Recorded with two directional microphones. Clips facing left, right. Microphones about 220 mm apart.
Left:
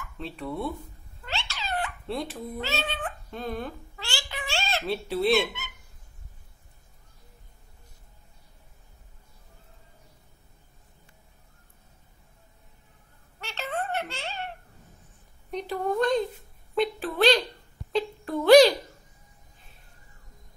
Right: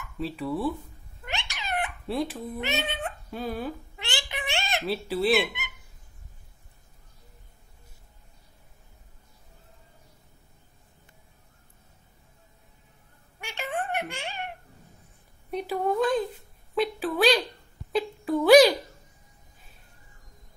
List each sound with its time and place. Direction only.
0.2 s speech: 5° right (ahead or behind)
1.2 s cat: 15° right (ahead or behind)
2.0 s speech: centre (ahead or behind)
2.6 s a child's voice: 20° right (ahead or behind)
3.3 s speech: 5° right (ahead or behind)
3.9 s a sound: 20° right (ahead or behind)
4.8 s speech: centre (ahead or behind)
13.4 s baby laughter: 15° right (ahead or behind)
15.5 s a sound: 5° right (ahead or behind)